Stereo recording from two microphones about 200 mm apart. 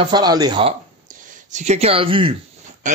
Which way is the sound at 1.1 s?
40° right (ahead or behind).